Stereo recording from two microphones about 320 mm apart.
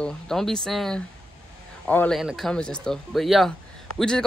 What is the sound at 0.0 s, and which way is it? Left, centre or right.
Speech, centre.